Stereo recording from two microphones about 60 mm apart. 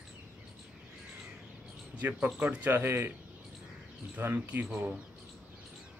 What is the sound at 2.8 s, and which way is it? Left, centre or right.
Speech, right.